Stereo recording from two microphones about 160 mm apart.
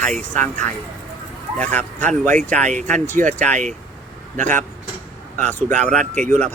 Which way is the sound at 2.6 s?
50° right (ahead or behind).